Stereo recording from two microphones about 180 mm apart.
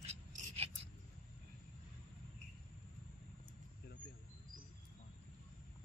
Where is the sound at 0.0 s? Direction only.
35° right (ahead or behind).